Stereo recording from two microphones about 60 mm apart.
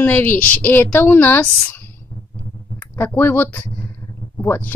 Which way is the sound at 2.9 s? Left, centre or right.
Left.